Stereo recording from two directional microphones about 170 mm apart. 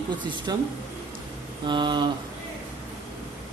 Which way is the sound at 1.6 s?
25° right (ahead or behind).